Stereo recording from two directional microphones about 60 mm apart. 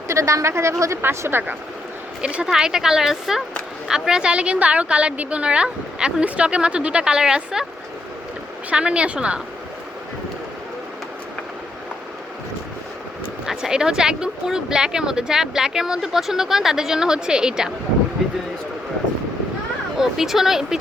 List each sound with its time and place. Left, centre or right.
0.1 s a woman's voice: right
1.2 s speech: right
2.2 s speech: centre
8.7 s speech: centre
13.4 s speech: centre
20.0 s speech: centre